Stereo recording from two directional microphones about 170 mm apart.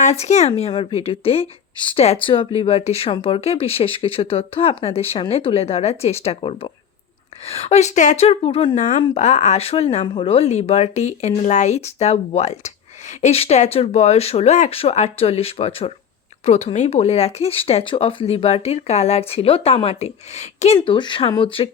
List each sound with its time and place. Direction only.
0.0 s speech: 40° left (ahead or behind)
20.7 s speech: 30° left (ahead or behind)